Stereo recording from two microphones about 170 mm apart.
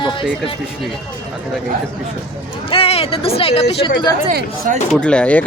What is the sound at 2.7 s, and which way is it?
Speech, 35° left (ahead or behind).